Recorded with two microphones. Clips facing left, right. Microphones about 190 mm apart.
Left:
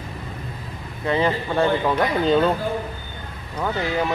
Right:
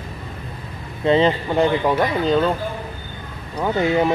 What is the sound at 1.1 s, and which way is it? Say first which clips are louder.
Speech: right 5 dB; 20° right (ahead or behind).